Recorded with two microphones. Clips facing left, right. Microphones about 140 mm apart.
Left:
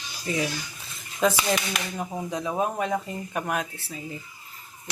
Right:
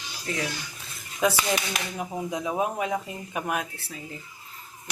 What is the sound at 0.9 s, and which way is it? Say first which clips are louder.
Dishes: left 1 dB; 5° right (ahead or behind).